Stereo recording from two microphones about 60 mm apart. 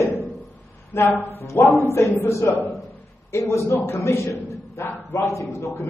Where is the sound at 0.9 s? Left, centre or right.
Left.